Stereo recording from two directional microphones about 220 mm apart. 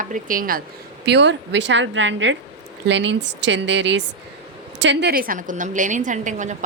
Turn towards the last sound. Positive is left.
turn(degrees=-35)  # may be behind; listen again after turning